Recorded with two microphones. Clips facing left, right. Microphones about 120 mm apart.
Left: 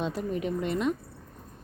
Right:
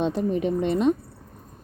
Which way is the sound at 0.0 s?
25° right (ahead or behind).